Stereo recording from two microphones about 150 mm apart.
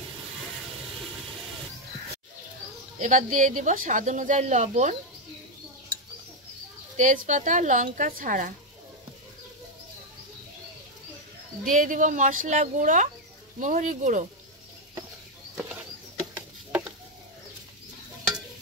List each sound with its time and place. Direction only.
3.0 s speech: 60° right (ahead or behind)
7.0 s speech: 55° right (ahead or behind)
11.7 s speech: 60° right (ahead or behind)
16.3 s a sound: 10° right (ahead or behind)